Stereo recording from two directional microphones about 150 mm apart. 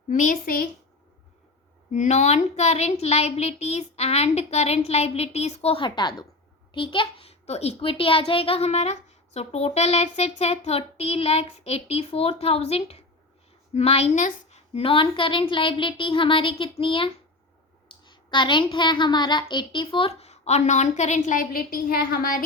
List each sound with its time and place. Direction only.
0.1 s a child's voice: 60° left (ahead or behind); by 0.7 s 75° left (ahead or behind)
1.9 s a child's voice: 50° left (ahead or behind); by 22.4 s 70° left (ahead or behind)